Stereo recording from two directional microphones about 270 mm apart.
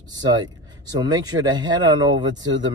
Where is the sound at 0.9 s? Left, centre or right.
Centre.